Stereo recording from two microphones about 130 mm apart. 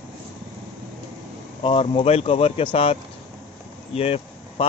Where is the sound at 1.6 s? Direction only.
45° left (ahead or behind).